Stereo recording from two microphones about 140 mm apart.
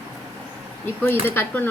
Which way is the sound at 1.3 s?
15° left (ahead or behind).